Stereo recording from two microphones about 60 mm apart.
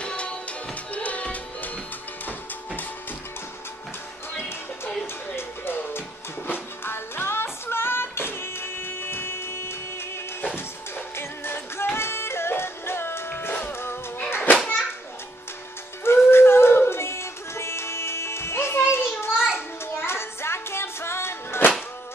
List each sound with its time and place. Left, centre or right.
0.0 s music: centre
5.3 s music: left
13.5 s music: left
14.3 s children playing: left
16.3 s music: left